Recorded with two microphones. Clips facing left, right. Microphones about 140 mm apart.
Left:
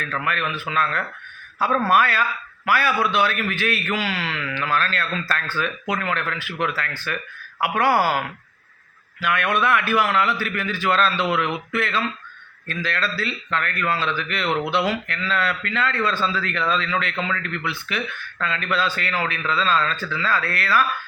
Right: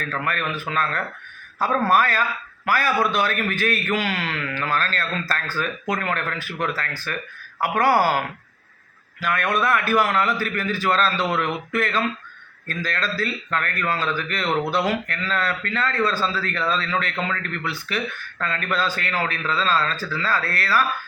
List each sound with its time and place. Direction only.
0.0 s a man's voice: 40° right (ahead or behind)
9.2 s a man's voice: 40° right (ahead or behind)